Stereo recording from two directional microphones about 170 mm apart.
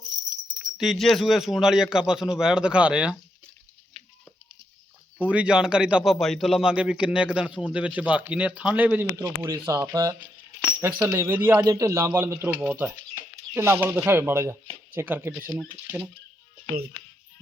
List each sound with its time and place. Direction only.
0.6 s speech: centre (ahead or behind)
5.2 s speech: 5° right (ahead or behind)
9.1 s speech: 20° right (ahead or behind)